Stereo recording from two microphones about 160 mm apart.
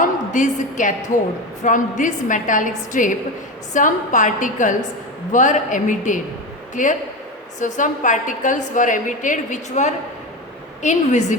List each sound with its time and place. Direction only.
0.0 s a woman's voice: 50° left (ahead or behind)